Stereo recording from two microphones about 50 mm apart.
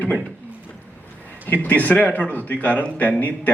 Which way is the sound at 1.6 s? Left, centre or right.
Left.